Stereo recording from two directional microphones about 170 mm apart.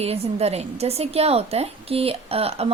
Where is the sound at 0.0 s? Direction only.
35° right (ahead or behind).